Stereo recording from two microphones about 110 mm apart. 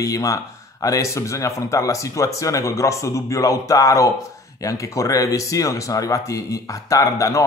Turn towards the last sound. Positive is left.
turn(degrees=30)  # may be behind; listen again after turning